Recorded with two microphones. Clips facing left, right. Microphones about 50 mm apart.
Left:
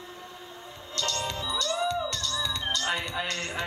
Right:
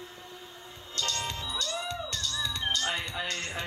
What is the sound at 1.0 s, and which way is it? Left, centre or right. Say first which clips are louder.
Music: left 3 dB; left.